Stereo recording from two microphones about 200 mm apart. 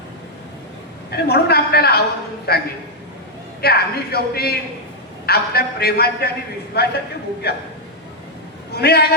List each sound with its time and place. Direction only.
1.1 s a man's voice: 55° left (ahead or behind)
8.7 s a man's voice: 55° left (ahead or behind)